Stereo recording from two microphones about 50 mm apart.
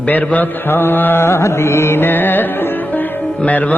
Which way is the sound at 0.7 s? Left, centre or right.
Left.